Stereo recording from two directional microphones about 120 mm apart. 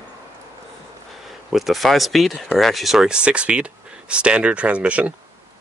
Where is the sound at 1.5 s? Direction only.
Centre (ahead or behind).